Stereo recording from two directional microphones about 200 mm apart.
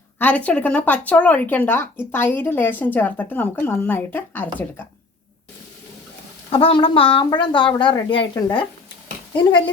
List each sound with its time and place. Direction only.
0.2 s speech: 5° left (ahead or behind)
6.5 s a woman's voice: 25° left (ahead or behind)